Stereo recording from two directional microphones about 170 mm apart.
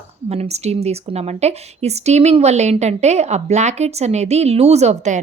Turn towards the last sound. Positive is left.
turn(degrees=-40)  # may be behind; listen again after turning